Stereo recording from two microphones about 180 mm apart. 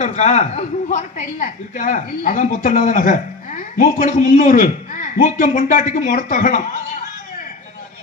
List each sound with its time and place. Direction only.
0.0 s a woman's voice: 40° left (ahead or behind)